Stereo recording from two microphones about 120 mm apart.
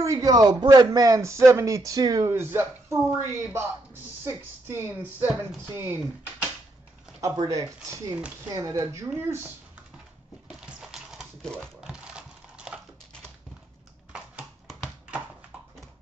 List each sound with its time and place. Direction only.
0.0 s speech: 30° right (ahead or behind)
3.0 s a woman's voice: 10° right (ahead or behind)
4.2 s speech: 20° right (ahead or behind)
7.2 s speech: 30° right (ahead or behind)
10.5 s a sound: 5° right (ahead or behind)
14.1 s a sound: 10° right (ahead or behind)